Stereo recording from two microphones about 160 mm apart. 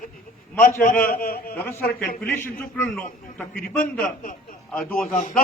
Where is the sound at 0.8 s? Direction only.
60° left (ahead or behind).